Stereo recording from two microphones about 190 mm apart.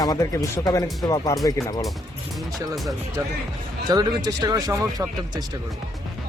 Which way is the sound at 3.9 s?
20° right (ahead or behind).